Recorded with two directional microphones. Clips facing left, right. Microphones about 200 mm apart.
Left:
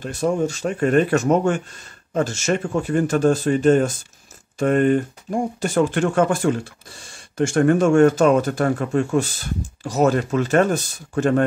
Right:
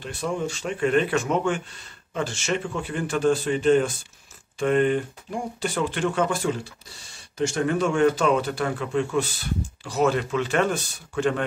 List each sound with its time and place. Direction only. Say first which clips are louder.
0.0 s speech: left 7 dB; 40° left (ahead or behind)